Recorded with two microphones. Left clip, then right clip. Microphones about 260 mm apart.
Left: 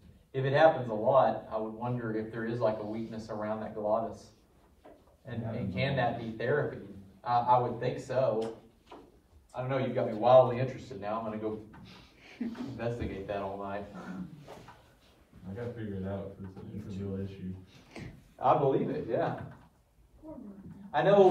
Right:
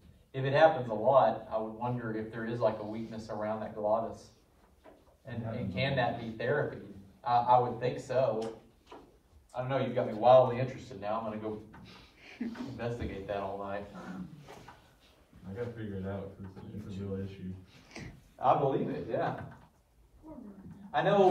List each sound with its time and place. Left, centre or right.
0.4 s speech: centre
9.5 s speech: centre
12.4 s a man's voice: centre
15.5 s a man's voice: left
18.4 s speech: centre
20.9 s speech: centre